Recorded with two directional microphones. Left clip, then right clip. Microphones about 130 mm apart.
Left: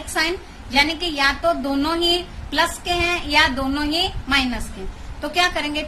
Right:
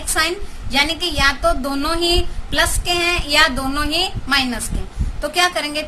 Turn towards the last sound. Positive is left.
turn(degrees=-30)  # may be behind; listen again after turning